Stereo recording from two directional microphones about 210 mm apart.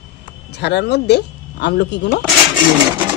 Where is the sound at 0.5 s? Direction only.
55° left (ahead or behind).